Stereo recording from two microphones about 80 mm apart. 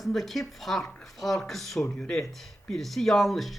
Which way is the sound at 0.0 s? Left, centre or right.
Centre.